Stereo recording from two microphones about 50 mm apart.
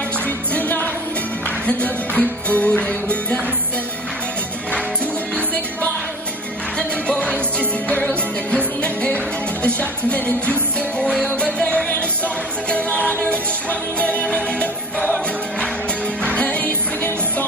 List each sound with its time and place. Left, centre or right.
0.6 s music: left
6.8 s music: left
11.3 s music: left
16.2 s music: left